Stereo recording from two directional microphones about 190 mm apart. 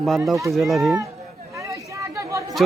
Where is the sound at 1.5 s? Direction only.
15° right (ahead or behind).